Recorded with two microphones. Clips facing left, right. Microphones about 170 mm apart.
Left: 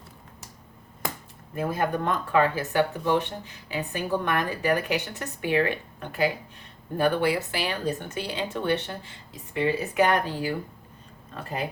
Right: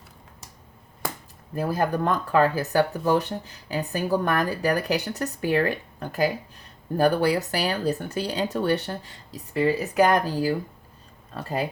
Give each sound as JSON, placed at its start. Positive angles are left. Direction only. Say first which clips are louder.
{"t": 1.5, "sound": "speech", "louder": "right 2 dB", "side_deg": -35}